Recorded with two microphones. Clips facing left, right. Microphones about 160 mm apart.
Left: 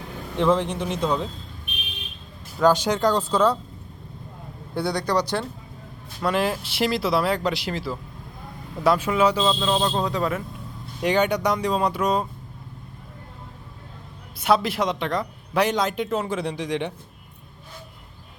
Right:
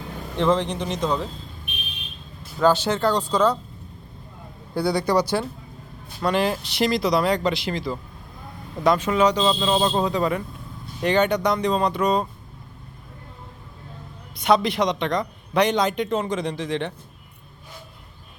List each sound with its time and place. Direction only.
0.3 s speech: 10° left (ahead or behind)
2.6 s speech: 10° left (ahead or behind)
4.7 s speech: centre (ahead or behind)
6.2 s speech: centre (ahead or behind)
11.0 s speech: 10° left (ahead or behind)
14.3 s speech: 5° left (ahead or behind)